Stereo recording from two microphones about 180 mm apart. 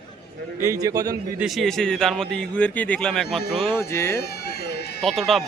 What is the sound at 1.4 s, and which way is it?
A man's voice, centre (ahead or behind).